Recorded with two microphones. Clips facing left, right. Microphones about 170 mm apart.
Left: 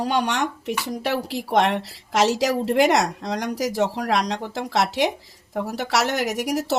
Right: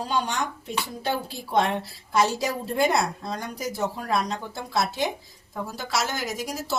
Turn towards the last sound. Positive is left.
turn(degrees=75)  # may be behind; listen again after turning